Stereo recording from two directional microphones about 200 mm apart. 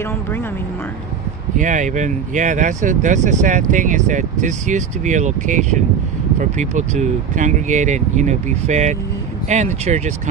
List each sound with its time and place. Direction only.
1.6 s speech: 40° right (ahead or behind)